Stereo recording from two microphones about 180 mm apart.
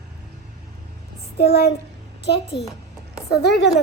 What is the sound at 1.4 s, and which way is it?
A child's voice, 60° left (ahead or behind).